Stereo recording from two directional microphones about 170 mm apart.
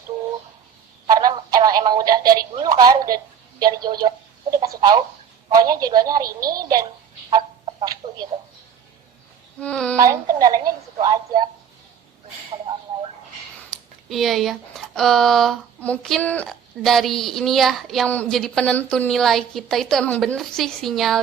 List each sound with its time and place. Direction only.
1.0 s telephone: 25° right (ahead or behind)
3.6 s speech: 25° right (ahead or behind)
4.6 s a sound: 20° right (ahead or behind)
5.5 s speech: 20° right (ahead or behind)
7.3 s fowl: 30° right (ahead or behind)
9.6 s speech: 5° left (ahead or behind)
10.0 s speech: 20° right (ahead or behind)
13.7 s a sound: centre (ahead or behind)
14.9 s speech: centre (ahead or behind)